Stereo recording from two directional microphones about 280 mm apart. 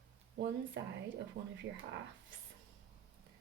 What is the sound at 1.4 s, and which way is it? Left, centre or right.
Speech, right.